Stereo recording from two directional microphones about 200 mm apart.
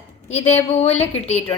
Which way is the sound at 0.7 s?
30° left (ahead or behind).